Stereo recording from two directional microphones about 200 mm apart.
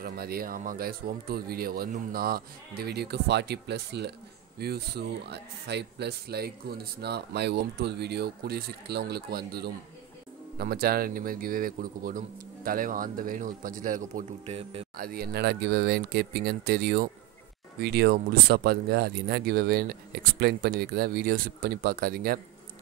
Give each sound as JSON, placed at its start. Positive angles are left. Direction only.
{"t": 0.0, "sound": "speech", "side_deg": -50}
{"t": 15.0, "sound": "speech", "side_deg": -50}